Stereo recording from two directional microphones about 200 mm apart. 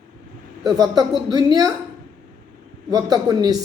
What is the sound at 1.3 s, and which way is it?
Speech, 20° right (ahead or behind).